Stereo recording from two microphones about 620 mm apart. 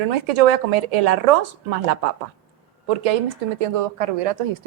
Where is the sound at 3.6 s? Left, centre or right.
Right.